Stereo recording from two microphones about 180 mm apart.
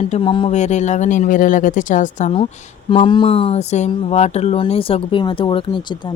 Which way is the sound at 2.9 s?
30° left (ahead or behind).